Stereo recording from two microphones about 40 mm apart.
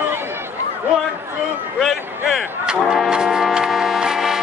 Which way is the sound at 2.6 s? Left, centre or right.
Centre.